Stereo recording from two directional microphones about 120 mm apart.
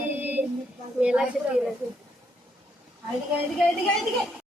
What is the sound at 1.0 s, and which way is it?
Speech, 5° right (ahead or behind).